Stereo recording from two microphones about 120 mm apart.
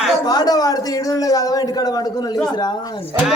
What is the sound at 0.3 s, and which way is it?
Speech, 30° left (ahead or behind).